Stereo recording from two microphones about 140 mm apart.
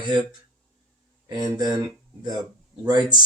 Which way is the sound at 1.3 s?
30° right (ahead or behind).